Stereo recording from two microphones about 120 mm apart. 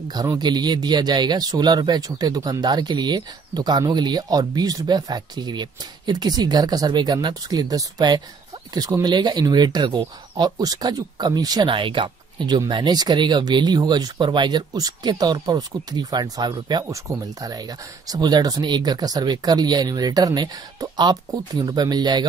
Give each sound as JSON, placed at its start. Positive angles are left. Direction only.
{"t": 0.1, "sound": "speech", "side_deg": -35}